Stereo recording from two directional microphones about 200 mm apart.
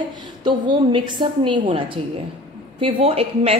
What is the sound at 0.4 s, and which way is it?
A woman's voice, 20° right (ahead or behind).